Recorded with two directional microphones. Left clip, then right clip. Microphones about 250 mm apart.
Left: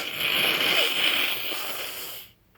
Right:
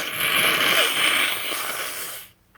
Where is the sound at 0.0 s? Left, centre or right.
Right.